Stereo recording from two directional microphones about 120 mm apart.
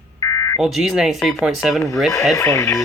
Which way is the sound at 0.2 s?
30° left (ahead or behind).